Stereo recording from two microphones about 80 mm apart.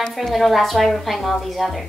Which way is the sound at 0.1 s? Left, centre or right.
Centre.